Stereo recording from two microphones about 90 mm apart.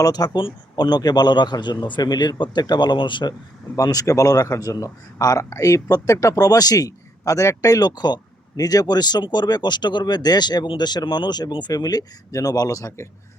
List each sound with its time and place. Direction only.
0.0 s speech: 45° left (ahead or behind); by 3.3 s 60° left (ahead or behind)
3.8 s speech: 40° left (ahead or behind)